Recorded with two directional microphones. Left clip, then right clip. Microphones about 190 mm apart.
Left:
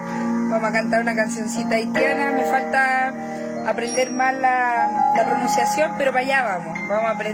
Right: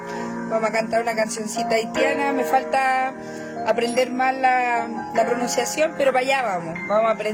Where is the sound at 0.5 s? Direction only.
15° right (ahead or behind).